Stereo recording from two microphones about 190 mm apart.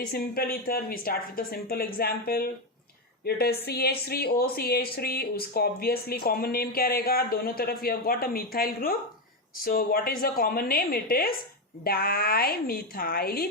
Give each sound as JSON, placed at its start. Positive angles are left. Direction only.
{"t": 0.1, "sound": "speech", "side_deg": 55}